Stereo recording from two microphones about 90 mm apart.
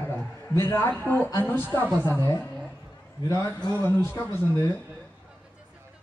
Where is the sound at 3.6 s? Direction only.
25° left (ahead or behind).